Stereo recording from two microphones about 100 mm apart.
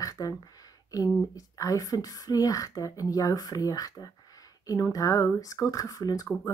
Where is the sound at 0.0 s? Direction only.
35° left (ahead or behind).